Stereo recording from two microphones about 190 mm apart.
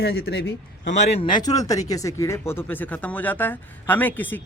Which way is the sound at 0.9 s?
40° left (ahead or behind).